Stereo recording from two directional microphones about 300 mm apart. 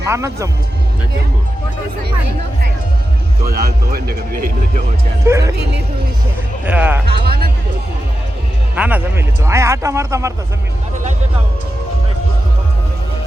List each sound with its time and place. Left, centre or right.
0.1 s speech: centre
3.4 s speech: right
5.2 s speech: centre
6.7 s speech: centre
7.1 s speech: right
8.7 s speech: centre